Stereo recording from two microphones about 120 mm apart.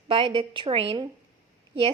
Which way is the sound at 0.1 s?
45° right (ahead or behind).